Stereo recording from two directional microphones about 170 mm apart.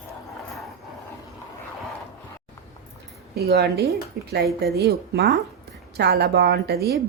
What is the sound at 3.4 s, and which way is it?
Speech, 70° right (ahead or behind).